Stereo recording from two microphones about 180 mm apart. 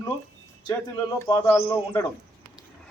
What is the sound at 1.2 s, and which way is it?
Speech, 20° left (ahead or behind).